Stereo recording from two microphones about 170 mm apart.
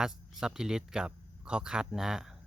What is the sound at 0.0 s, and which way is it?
Speech, 5° right (ahead or behind).